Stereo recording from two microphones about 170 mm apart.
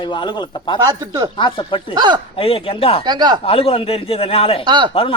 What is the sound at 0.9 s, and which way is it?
Speech, 20° right (ahead or behind).